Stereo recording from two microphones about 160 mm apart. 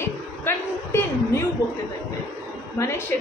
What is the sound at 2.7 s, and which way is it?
Speech, 15° left (ahead or behind).